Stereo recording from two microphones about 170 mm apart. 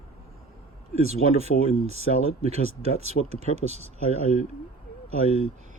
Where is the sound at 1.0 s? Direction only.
40° right (ahead or behind).